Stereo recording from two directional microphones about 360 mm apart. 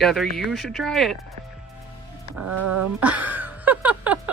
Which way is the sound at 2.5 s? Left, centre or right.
Right.